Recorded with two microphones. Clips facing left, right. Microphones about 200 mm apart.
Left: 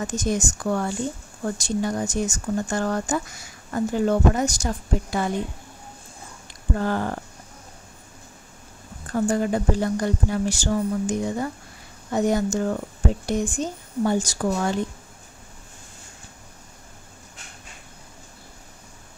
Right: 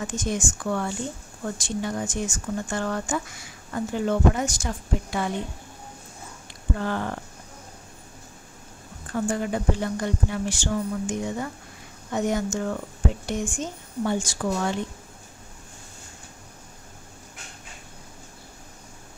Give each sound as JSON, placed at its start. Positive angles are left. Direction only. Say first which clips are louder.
{"t": 0.0, "sound": "speech", "louder": "left 3 dB", "side_deg": 40}
{"t": 6.8, "sound": "speech", "louder": "left 4 dB", "side_deg": 40}
{"t": 9.1, "sound": "speech", "louder": "left 4 dB", "side_deg": 40}